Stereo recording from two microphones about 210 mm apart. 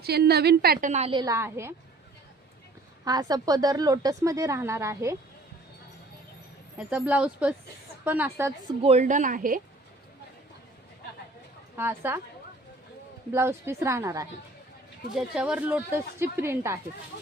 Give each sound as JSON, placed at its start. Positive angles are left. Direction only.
{"t": 0.0, "sound": "a woman's voice", "side_deg": -50}
{"t": 3.0, "sound": "a woman's voice", "side_deg": -15}
{"t": 6.7, "sound": "a woman's voice", "side_deg": -5}
{"t": 8.8, "sound": "a woman's voice", "side_deg": -30}
{"t": 11.8, "sound": "a woman's voice", "side_deg": -10}
{"t": 13.3, "sound": "a woman's voice", "side_deg": -10}
{"t": 15.1, "sound": "a woman's voice", "side_deg": -5}